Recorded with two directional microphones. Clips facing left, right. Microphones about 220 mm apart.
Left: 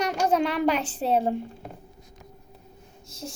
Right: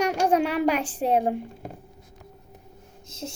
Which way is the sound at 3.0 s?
20° right (ahead or behind).